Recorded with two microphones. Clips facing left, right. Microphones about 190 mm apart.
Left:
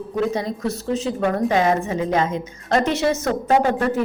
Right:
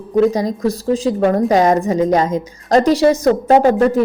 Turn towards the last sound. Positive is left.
turn(degrees=-40)  # may be behind; listen again after turning